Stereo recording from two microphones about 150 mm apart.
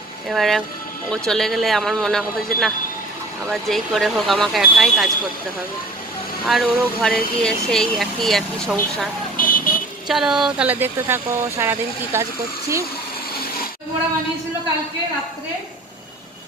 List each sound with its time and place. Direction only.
0.3 s speech: centre (ahead or behind)
6.4 s speech: centre (ahead or behind)
9.4 s vehicle: 70° left (ahead or behind)
10.1 s speech: 5° right (ahead or behind)